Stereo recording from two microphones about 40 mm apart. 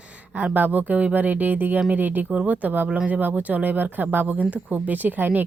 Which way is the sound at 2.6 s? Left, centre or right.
Right.